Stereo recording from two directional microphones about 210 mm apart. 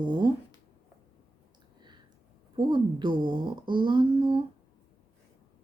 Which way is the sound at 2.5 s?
20° right (ahead or behind).